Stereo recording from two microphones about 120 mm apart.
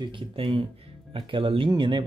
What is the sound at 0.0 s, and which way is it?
Speech, 40° right (ahead or behind).